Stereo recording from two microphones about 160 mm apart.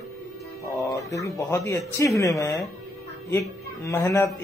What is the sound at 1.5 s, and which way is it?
A man's voice, 20° left (ahead or behind).